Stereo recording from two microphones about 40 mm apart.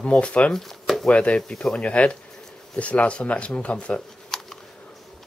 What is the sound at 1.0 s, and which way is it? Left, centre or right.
Speech, left.